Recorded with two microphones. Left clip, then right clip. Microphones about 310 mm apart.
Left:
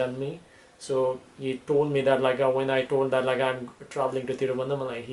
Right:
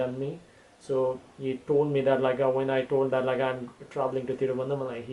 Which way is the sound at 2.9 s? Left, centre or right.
Right.